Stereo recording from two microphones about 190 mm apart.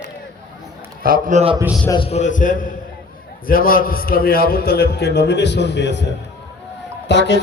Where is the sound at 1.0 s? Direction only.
45° right (ahead or behind).